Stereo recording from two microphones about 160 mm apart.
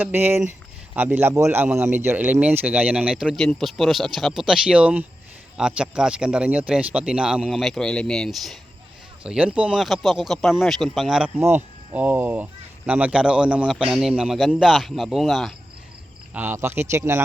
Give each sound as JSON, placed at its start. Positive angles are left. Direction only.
{"t": 0.0, "sound": "speech", "side_deg": -10}
{"t": 11.3, "sound": "speech", "side_deg": -15}
{"t": 16.3, "sound": "speech", "side_deg": -15}